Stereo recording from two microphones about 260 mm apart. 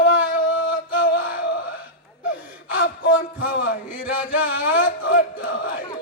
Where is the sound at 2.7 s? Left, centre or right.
Left.